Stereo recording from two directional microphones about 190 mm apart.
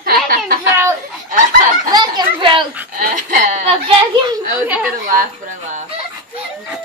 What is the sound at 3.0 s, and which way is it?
Speech, 50° right (ahead or behind).